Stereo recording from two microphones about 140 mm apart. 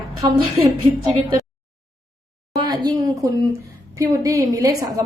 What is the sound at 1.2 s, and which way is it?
Speech, 35° right (ahead or behind).